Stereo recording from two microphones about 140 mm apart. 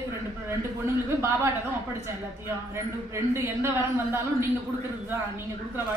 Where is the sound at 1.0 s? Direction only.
20° right (ahead or behind).